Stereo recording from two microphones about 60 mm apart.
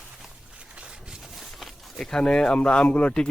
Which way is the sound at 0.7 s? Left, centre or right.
Centre.